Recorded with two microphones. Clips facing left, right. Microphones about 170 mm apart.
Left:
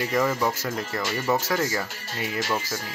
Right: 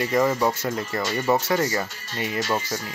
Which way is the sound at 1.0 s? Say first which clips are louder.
Right 3 dB; 20° right (ahead or behind).